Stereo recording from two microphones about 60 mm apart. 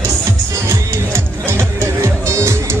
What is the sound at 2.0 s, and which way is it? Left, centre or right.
Music, right.